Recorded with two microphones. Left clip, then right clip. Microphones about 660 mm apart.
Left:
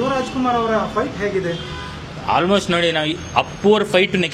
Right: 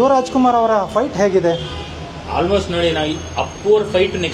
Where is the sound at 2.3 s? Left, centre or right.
Left.